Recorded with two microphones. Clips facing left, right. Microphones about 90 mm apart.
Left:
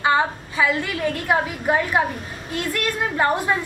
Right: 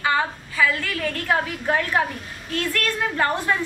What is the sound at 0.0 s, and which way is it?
A woman's voice, 20° left (ahead or behind).